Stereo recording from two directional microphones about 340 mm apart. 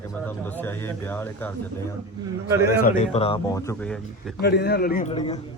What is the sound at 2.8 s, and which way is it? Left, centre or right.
A man's voice, centre.